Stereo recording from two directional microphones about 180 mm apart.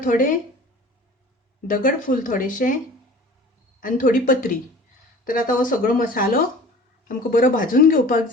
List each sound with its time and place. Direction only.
0.0 s speech: 50° left (ahead or behind)
1.6 s speech: 50° left (ahead or behind)
3.8 s speech: 50° left (ahead or behind)